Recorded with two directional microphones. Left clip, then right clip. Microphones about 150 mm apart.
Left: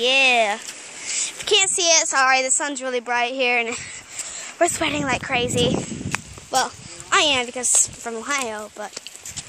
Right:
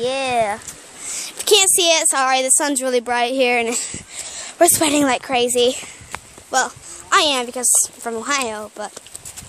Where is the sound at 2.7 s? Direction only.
90° right.